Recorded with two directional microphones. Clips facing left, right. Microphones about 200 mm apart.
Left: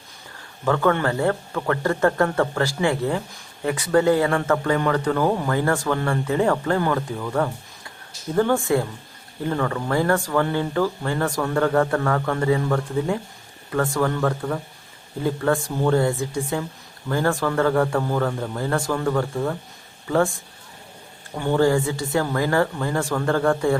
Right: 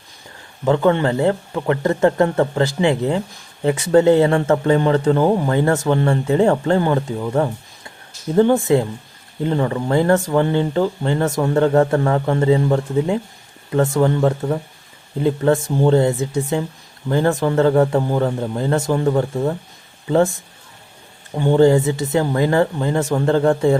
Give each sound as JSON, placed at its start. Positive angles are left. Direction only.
{"t": 0.6, "sound": "speech", "side_deg": -20}
{"t": 21.3, "sound": "speech", "side_deg": -20}